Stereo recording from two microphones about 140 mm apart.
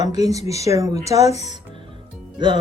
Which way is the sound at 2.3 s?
35° right (ahead or behind).